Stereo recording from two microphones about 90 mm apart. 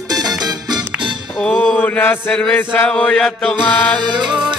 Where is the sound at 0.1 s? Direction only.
45° right (ahead or behind).